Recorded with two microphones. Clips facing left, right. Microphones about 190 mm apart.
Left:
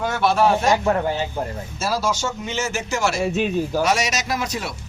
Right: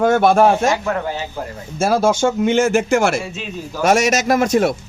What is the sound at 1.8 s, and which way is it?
Speech, 55° right (ahead or behind).